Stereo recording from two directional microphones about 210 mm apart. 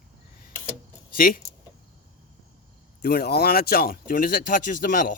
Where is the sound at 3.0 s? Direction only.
50° left (ahead or behind).